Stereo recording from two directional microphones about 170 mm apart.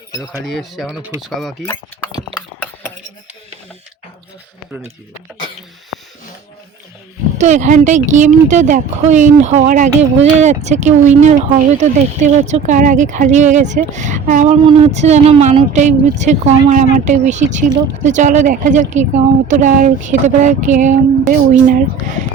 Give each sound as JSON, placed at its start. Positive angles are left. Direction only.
{"t": 0.1, "sound": "speech", "side_deg": 15}
{"t": 0.4, "sound": "speech", "side_deg": 0}
{"t": 1.6, "sound": "speech", "side_deg": 15}
{"t": 7.3, "sound": "speech", "side_deg": -45}